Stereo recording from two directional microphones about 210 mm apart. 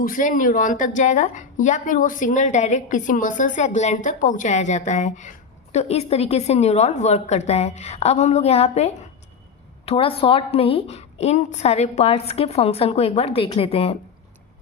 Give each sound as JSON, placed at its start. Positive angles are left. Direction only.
{"t": 0.0, "sound": "a woman's voice", "side_deg": 40}